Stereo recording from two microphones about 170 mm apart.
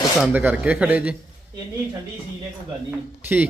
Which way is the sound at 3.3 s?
10° right (ahead or behind).